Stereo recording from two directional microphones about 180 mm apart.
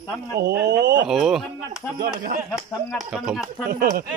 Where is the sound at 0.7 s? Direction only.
70° right (ahead or behind).